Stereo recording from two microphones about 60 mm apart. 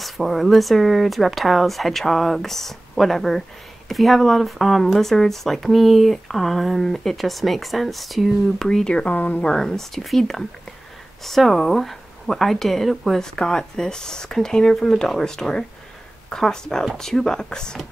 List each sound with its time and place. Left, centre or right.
0.0 s speech: centre
8.6 s speech: centre
9.1 s a woman's voice: left
9.4 s speech: centre